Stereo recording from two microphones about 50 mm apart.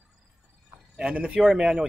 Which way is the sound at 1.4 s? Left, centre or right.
Centre.